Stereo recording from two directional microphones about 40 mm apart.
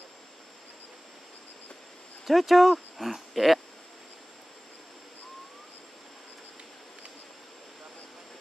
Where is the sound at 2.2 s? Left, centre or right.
Centre.